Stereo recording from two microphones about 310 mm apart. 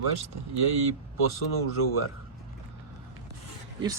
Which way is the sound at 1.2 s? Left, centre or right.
Left.